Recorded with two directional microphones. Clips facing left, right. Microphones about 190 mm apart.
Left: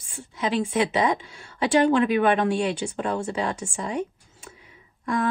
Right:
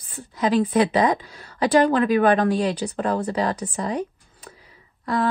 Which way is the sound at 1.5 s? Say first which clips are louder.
Right 2 dB; 40° right (ahead or behind).